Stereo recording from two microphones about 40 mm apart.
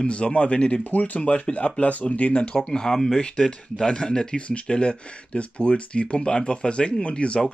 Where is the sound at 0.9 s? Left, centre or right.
Left.